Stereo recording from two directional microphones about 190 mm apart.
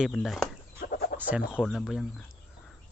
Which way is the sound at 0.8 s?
55° left (ahead or behind).